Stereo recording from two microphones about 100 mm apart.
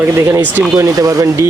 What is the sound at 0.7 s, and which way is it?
Speech, 35° right (ahead or behind).